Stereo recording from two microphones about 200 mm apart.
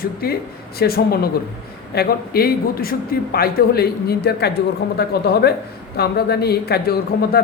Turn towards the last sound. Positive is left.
turn(degrees=50)  # may be behind; listen again after turning